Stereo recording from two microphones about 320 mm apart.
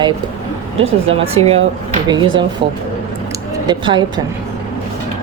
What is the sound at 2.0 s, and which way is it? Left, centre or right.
Speech, centre.